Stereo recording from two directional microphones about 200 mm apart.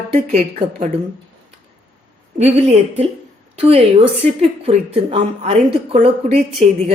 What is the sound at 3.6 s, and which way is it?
A woman's voice, 30° right (ahead or behind).